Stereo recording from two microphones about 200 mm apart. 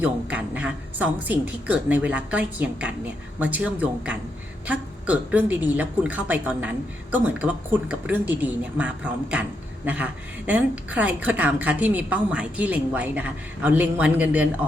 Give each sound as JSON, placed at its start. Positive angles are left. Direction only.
{"t": 0.0, "sound": "a woman's voice", "side_deg": -5}